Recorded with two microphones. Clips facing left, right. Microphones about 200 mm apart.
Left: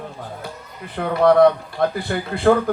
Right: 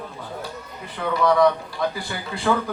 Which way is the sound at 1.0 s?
55° left (ahead or behind).